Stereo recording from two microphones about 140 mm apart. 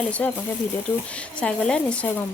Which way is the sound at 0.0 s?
10° left (ahead or behind).